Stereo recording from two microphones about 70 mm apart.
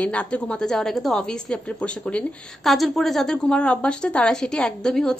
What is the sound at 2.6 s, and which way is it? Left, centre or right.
Speech, centre.